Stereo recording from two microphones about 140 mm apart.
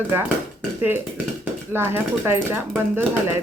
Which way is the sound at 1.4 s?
15° right (ahead or behind).